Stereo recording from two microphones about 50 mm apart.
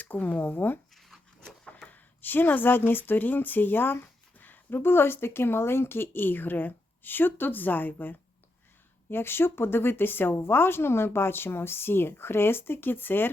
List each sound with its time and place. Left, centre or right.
0.0 s speech: left
0.9 s a sound: centre
1.5 s a sound: centre
1.9 s speech: left
4.8 s a woman's voice: left
9.0 s a woman's voice: left